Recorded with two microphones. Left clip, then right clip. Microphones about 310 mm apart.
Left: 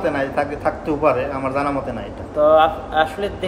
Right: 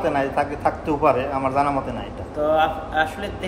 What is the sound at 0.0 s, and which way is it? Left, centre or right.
A man's voice, centre.